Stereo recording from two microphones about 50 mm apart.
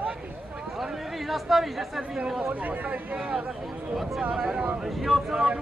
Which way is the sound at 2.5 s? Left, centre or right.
Right.